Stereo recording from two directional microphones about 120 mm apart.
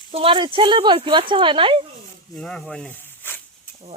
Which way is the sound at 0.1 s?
50° right (ahead or behind).